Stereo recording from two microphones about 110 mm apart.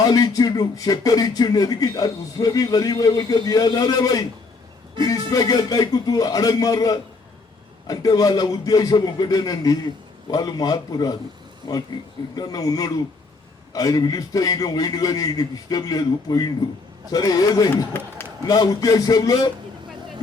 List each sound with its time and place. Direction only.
0.0 s speech: 35° left (ahead or behind)